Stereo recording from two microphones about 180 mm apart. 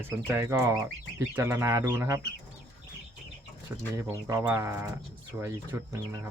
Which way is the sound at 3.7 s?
10° right (ahead or behind).